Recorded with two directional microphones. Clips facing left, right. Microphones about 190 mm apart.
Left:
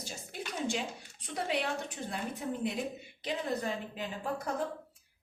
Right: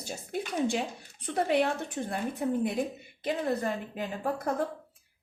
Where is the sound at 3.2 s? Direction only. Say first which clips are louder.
Right 5 dB; 50° right (ahead or behind).